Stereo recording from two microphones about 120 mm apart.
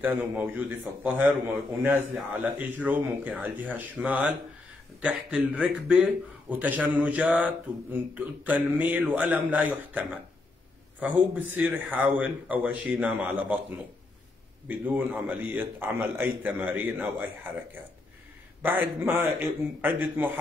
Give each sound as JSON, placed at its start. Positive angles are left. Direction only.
{"t": 0.0, "sound": "mantra", "side_deg": -15}
{"t": 18.6, "sound": "mantra", "side_deg": -15}